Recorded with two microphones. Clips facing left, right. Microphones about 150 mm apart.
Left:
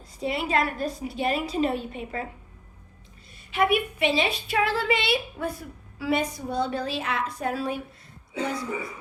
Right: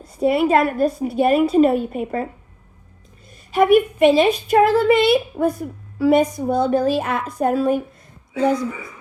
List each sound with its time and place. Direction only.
0.2 s a woman's voice: 55° right (ahead or behind)
3.5 s a woman's voice: 45° right (ahead or behind)